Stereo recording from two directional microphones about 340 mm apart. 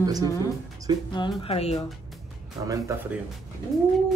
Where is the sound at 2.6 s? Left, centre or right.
Centre.